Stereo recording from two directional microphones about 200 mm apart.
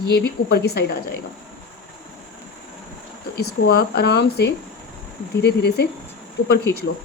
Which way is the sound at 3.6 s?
50° left (ahead or behind).